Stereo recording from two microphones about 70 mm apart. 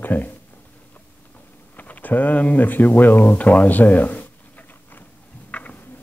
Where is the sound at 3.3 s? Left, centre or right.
Left.